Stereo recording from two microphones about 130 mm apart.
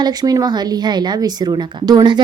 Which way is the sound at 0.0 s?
30° right (ahead or behind).